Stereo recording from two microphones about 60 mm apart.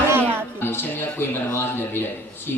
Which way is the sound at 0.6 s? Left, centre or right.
Left.